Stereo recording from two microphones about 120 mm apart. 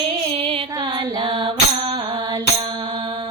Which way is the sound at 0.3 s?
55° right (ahead or behind).